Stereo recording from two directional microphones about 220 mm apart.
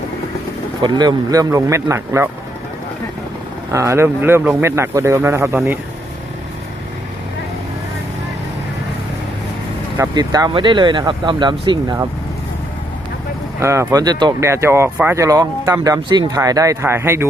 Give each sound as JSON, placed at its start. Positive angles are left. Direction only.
{"t": 0.8, "sound": "speech", "side_deg": -20}
{"t": 3.7, "sound": "speech", "side_deg": -15}
{"t": 10.0, "sound": "speech", "side_deg": -15}
{"t": 13.6, "sound": "speech", "side_deg": -10}